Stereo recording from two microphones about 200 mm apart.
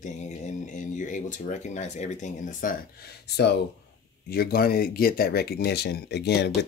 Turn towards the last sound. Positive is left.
turn(degrees=55)  # may be behind; listen again after turning